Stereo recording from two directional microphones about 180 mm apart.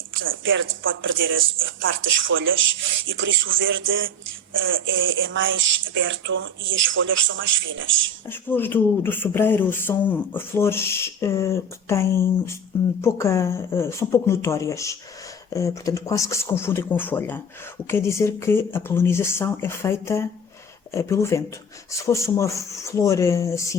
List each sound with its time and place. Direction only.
0.1 s speech: 90° right
8.3 s speech: 10° left (ahead or behind)